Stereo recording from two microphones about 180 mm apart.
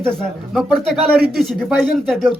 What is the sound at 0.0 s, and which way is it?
Speech, centre (ahead or behind).